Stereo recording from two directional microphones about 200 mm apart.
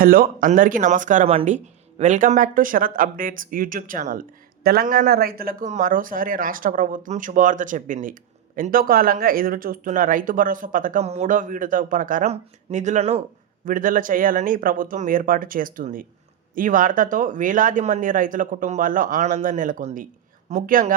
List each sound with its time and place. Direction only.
0.0 s speech: 45° right (ahead or behind)